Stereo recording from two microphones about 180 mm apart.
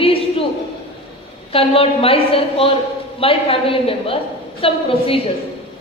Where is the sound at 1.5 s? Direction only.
30° left (ahead or behind).